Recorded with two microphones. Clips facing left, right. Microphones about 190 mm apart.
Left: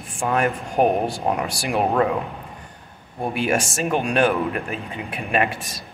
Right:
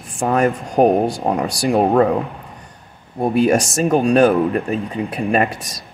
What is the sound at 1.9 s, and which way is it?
Speech, 50° right (ahead or behind).